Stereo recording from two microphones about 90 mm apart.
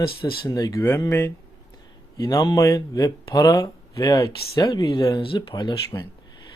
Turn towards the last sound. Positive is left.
turn(degrees=55)  # may be behind; listen again after turning